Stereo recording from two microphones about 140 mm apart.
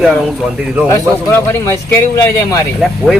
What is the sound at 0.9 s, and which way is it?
A man's voice, 20° left (ahead or behind).